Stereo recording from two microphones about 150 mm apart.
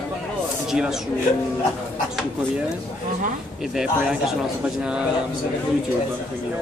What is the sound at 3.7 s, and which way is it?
Speech, 5° right (ahead or behind).